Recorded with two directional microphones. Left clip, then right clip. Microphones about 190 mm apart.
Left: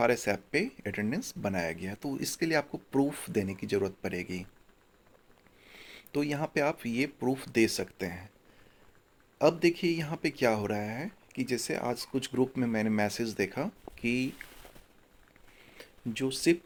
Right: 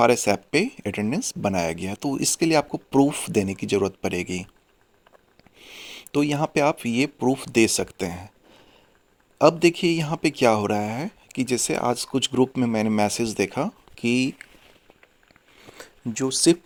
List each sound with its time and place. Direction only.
0.0 s speech: 40° right (ahead or behind)
5.6 s speech: 35° right (ahead or behind)
9.4 s speech: 40° right (ahead or behind)
15.7 s a sound: 30° right (ahead or behind)